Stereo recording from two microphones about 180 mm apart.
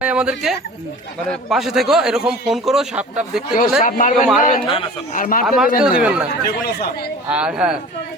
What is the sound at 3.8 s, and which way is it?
Speech, 45° left (ahead or behind).